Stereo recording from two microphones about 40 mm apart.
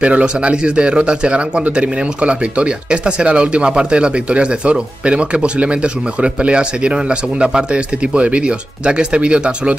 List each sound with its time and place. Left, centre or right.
0.0 s speech: right